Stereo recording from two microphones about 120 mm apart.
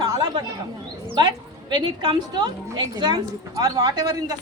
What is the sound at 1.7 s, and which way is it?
A woman's voice, 35° right (ahead or behind).